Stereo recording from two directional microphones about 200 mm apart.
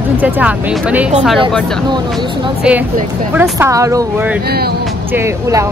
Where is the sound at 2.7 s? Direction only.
5° right (ahead or behind).